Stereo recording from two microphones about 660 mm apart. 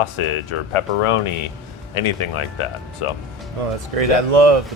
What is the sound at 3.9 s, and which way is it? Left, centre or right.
Speech, right.